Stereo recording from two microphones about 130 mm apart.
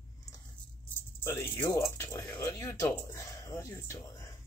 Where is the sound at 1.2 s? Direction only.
20° left (ahead or behind).